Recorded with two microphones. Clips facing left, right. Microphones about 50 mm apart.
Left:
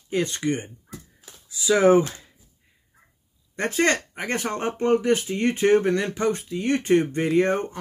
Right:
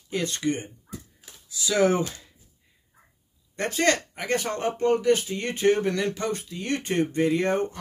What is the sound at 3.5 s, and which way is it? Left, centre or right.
Speech, left.